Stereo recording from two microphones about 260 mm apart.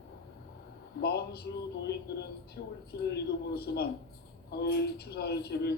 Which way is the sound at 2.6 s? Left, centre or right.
Left.